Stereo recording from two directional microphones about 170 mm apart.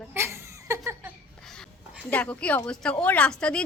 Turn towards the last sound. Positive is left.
turn(degrees=5)  # may be behind; listen again after turning